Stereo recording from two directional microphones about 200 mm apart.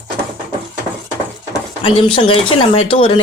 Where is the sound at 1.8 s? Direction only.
30° left (ahead or behind).